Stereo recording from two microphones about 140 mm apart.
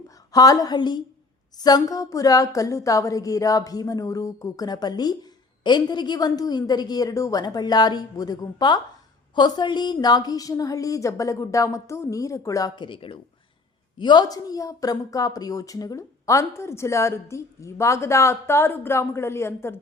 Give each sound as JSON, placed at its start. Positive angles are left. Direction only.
{"t": 0.3, "sound": "a woman's voice", "side_deg": 25}